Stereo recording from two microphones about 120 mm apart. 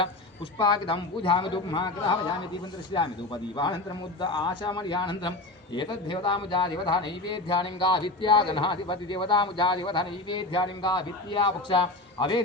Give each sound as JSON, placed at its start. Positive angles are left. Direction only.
{"t": 0.6, "sound": "a man's voice", "side_deg": 45}